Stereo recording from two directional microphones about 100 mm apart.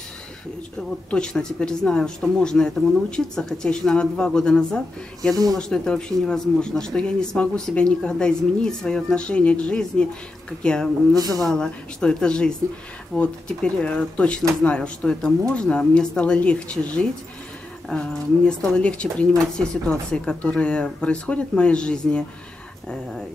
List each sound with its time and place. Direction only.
1.1 s speech: 5° left (ahead or behind)
5.3 s speech: 35° right (ahead or behind)
5.6 s speech: 10° left (ahead or behind)
11.1 s speech: 40° right (ahead or behind)
11.4 s speech: 5° left (ahead or behind)